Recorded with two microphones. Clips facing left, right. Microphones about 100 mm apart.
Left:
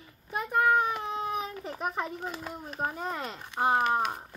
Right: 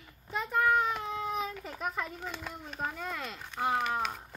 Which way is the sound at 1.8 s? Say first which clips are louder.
Left 3 dB; 50° left (ahead or behind).